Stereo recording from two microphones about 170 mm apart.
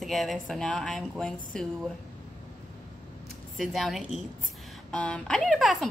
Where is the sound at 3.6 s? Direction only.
Centre (ahead or behind).